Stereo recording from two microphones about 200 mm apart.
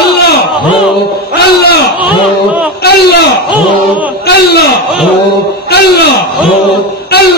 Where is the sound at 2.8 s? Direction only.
55° left (ahead or behind).